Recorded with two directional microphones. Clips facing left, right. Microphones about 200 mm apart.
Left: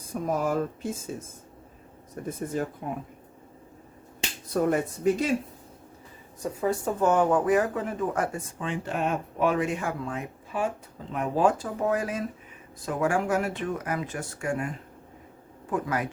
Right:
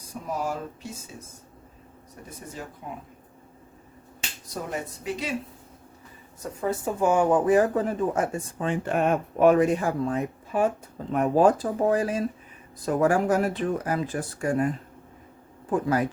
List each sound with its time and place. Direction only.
0.1 s speech: 50° left (ahead or behind)
2.2 s speech: 50° left (ahead or behind)
4.7 s speech: 45° left (ahead or behind)
6.6 s speech: 5° right (ahead or behind); by 7.9 s 35° right (ahead or behind)
8.1 s speech: 25° right (ahead or behind)
8.6 s speech: 50° right (ahead or behind)
15.7 s speech: 35° right (ahead or behind)